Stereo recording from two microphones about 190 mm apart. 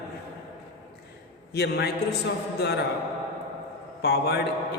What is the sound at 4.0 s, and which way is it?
Speech, 60° left (ahead or behind).